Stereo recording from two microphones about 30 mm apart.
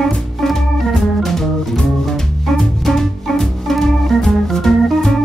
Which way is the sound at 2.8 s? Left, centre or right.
Centre.